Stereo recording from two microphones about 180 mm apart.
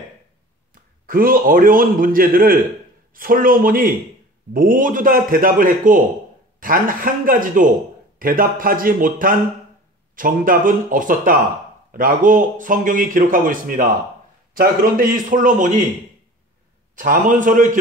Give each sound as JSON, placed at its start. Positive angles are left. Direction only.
{"t": 1.0, "sound": "a man's voice", "side_deg": -50}
{"t": 16.9, "sound": "a man's voice", "side_deg": -50}